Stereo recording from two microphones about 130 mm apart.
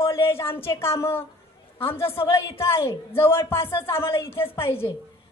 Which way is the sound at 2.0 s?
45° left (ahead or behind).